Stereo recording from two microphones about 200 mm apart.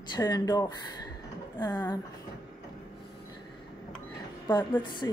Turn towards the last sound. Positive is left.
turn(degrees=15)  # may be behind; listen again after turning